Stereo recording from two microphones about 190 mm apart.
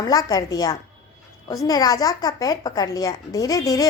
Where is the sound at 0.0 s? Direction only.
20° left (ahead or behind).